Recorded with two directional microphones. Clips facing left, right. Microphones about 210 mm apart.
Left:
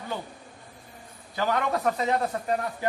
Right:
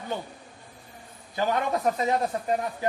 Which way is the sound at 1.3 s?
20° right (ahead or behind).